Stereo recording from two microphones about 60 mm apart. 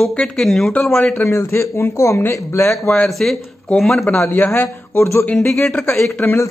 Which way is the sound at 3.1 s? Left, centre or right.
Centre.